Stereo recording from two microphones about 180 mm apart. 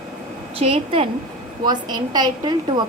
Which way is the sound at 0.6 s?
30° right (ahead or behind).